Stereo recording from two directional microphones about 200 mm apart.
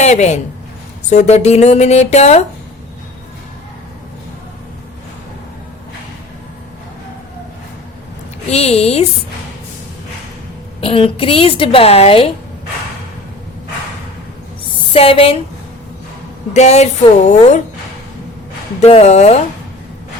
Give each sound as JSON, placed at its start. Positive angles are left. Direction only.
{"t": 0.0, "sound": "speech", "side_deg": 35}
{"t": 8.4, "sound": "speech", "side_deg": 30}
{"t": 10.8, "sound": "a woman's voice", "side_deg": 25}
{"t": 14.9, "sound": "a woman's voice", "side_deg": 30}
{"t": 16.6, "sound": "speech", "side_deg": 35}
{"t": 18.8, "sound": "speech", "side_deg": 30}